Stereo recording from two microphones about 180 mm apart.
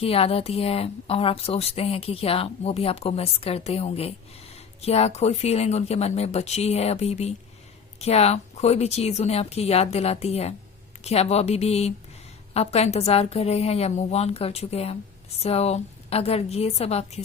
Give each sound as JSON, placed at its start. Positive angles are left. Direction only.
{"t": 0.0, "sound": "speech", "side_deg": 35}